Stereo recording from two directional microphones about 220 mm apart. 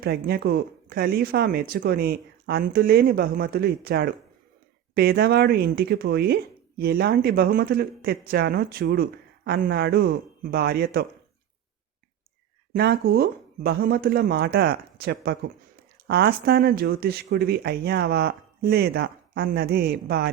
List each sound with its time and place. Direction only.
0.0 s speech: 45° right (ahead or behind)
12.7 s speech: 45° right (ahead or behind)